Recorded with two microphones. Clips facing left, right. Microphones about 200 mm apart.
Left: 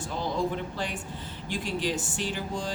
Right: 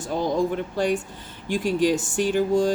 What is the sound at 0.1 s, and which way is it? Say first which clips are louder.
Speech: right 7 dB; 45° right (ahead or behind).